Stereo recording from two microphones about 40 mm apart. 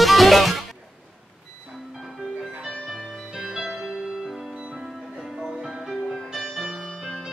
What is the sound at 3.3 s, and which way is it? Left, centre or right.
Music, centre.